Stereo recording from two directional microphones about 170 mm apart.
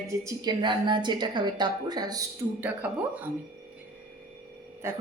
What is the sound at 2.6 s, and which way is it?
Speech, 10° right (ahead or behind).